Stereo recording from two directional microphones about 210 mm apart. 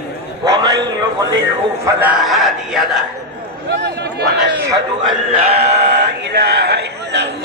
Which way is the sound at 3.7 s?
55° right (ahead or behind).